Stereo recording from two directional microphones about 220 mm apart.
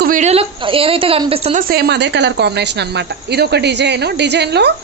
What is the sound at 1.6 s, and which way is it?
A woman's voice, 45° right (ahead or behind).